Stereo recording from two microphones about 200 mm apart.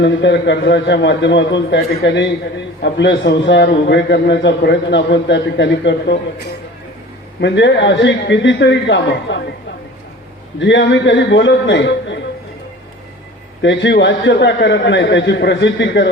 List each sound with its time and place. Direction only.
0.0 s a man's voice: 65° left (ahead or behind)
10.6 s a man's voice: 65° left (ahead or behind)
13.6 s a man's voice: 65° left (ahead or behind)